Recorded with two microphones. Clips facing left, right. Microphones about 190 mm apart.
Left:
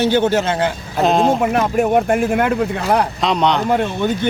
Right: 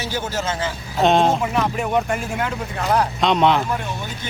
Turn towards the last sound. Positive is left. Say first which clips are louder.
# left 11 dB
turn(degrees=60)  # may be behind; listen again after turning